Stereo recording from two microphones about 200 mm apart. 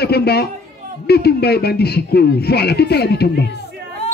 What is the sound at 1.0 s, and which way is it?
Speech, 55° left (ahead or behind).